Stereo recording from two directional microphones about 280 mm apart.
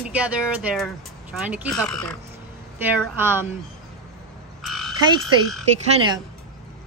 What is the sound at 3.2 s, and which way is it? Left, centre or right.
Speech, centre.